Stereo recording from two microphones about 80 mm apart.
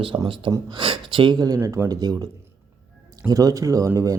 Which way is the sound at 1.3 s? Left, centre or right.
Right.